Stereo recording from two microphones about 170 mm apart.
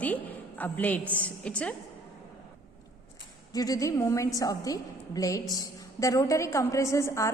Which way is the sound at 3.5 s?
20° left (ahead or behind).